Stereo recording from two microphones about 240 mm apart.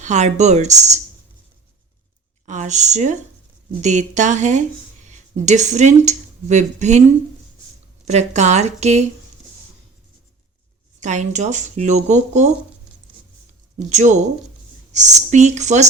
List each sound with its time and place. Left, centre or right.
0.0 s a woman's voice: right
2.5 s a woman's voice: right
8.0 s a woman's voice: right
11.0 s a woman's voice: right
13.7 s a woman's voice: right